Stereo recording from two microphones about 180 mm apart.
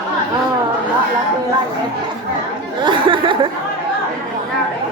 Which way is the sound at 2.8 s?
25° right (ahead or behind).